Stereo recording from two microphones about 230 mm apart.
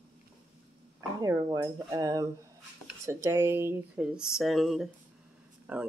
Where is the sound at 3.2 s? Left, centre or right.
Centre.